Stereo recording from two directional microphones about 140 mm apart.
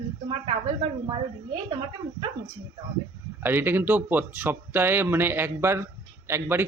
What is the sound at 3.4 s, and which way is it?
Speech, 15° right (ahead or behind).